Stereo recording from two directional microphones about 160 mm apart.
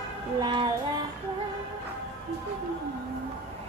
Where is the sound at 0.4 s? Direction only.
30° right (ahead or behind).